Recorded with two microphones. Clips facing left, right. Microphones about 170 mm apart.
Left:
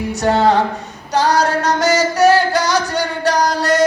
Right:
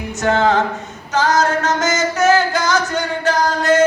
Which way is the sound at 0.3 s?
35° left (ahead or behind).